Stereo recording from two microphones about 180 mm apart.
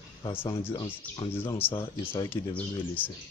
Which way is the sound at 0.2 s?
25° left (ahead or behind).